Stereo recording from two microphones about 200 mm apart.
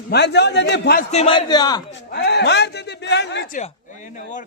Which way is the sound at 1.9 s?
60° left (ahead or behind).